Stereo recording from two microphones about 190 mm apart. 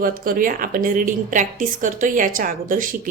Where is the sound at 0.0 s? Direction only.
50° right (ahead or behind).